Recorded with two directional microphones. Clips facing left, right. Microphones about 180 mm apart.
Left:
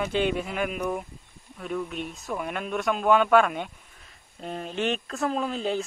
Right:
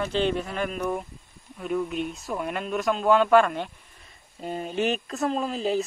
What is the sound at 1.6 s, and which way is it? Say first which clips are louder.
Speech: right 4 dB; 5° right (ahead or behind).